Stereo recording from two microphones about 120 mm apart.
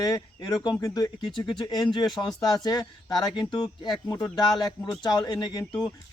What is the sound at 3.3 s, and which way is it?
Speech, 40° left (ahead or behind).